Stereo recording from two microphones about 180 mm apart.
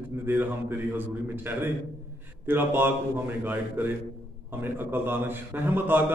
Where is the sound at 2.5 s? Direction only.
10° right (ahead or behind).